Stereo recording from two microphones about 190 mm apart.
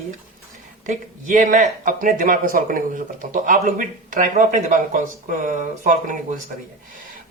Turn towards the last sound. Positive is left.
turn(degrees=-40)  # may be behind; listen again after turning